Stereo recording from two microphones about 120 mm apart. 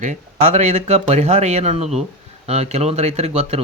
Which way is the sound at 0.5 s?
70° right (ahead or behind).